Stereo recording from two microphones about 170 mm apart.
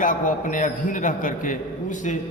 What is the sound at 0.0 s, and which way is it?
A man's voice, 50° left (ahead or behind).